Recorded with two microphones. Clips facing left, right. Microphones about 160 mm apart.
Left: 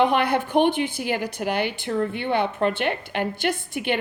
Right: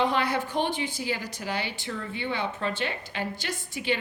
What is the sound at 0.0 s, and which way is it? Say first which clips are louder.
A woman's voice: left 6 dB; 60° left (ahead or behind).